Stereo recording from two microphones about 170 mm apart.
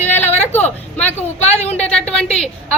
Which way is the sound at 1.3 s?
40° left (ahead or behind).